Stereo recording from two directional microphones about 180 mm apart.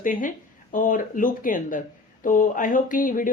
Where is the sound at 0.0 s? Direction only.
50° left (ahead or behind).